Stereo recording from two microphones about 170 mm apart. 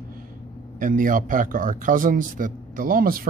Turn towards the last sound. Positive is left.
turn(degrees=-60)  # may be behind; listen again after turning